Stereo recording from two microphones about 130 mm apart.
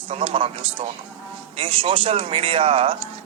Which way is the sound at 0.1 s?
45° right (ahead or behind).